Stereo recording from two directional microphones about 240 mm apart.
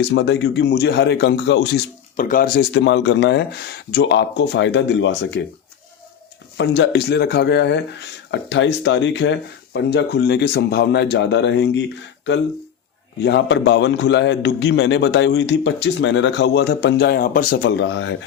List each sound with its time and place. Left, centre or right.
0.0 s a man's voice: left
2.1 s a man's voice: left
6.6 s a man's voice: left
13.1 s a man's voice: left
17.7 s a man's voice: left